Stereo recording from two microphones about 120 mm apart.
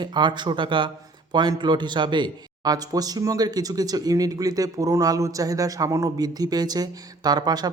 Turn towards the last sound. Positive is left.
turn(degrees=-35)  # may be behind; listen again after turning